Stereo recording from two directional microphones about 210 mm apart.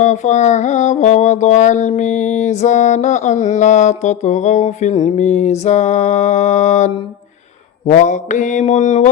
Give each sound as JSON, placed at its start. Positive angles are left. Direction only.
{"t": 0.0, "sound": "mantra", "side_deg": 35}